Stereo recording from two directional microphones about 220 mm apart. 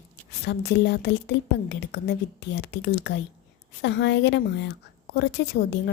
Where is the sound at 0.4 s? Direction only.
50° left (ahead or behind).